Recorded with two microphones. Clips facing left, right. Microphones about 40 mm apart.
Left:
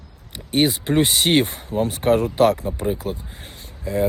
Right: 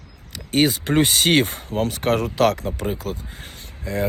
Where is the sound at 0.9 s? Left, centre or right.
Right.